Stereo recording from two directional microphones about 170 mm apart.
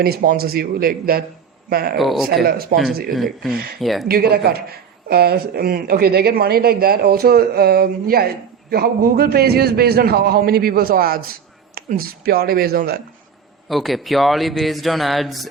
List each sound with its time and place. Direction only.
0.0 s speech: 60° right (ahead or behind)
2.0 s speech: centre (ahead or behind)
2.2 s speech: 65° right (ahead or behind)
3.1 s speech: centre (ahead or behind)
3.5 s speech: 65° right (ahead or behind)
3.8 s speech: centre (ahead or behind)
4.1 s speech: 65° right (ahead or behind)
13.7 s speech: centre (ahead or behind)